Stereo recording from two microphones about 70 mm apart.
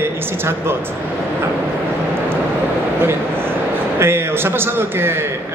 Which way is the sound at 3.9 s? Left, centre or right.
Right.